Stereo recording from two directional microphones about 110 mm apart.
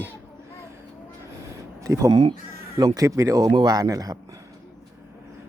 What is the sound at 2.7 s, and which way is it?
Speech, 35° right (ahead or behind).